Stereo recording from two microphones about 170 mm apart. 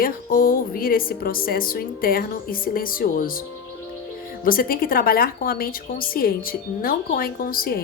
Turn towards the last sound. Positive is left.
turn(degrees=60)  # may be behind; listen again after turning